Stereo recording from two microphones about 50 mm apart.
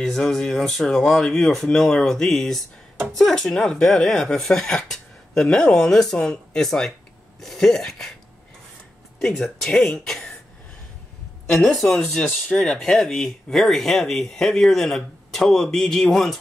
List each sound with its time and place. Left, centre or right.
0.0 s speech: centre
9.2 s speech: centre
11.5 s speech: centre
12.4 s speech: left
12.7 s speech: centre